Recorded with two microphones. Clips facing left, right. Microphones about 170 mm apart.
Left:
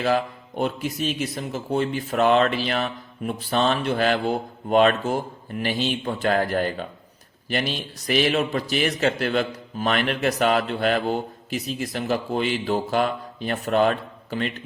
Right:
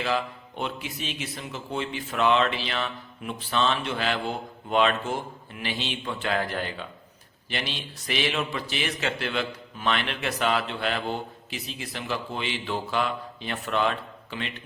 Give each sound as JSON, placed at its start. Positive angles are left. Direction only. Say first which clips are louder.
{"t": 0.0, "sound": "a man's voice", "louder": "left 5 dB", "side_deg": 45}